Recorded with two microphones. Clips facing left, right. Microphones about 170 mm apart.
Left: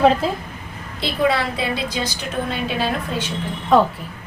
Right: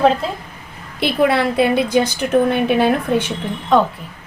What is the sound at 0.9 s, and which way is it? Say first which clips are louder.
A woman's voice: right 4 dB; 60° right (ahead or behind).